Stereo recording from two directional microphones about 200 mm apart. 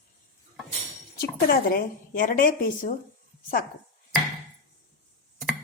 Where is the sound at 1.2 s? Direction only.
50° left (ahead or behind).